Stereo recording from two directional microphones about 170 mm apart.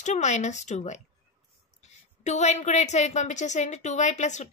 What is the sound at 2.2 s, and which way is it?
A woman's voice, 45° left (ahead or behind).